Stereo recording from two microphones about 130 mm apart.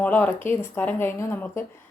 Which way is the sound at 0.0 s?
10° left (ahead or behind).